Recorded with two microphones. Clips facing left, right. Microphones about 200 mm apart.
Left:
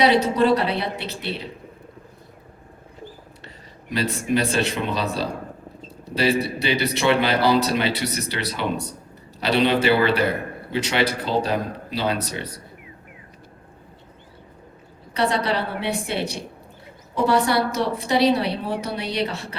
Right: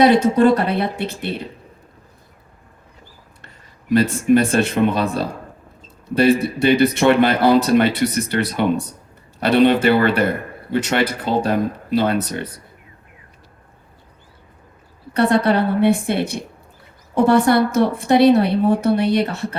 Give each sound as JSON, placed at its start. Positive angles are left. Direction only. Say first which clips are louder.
{"t": 0.0, "sound": "a man's voice", "louder": "right 5 dB", "side_deg": -50}
{"t": 4.3, "sound": "a man's voice", "louder": "right 6 dB", "side_deg": -50}
{"t": 15.1, "sound": "a man's voice", "louder": "right 6 dB", "side_deg": -50}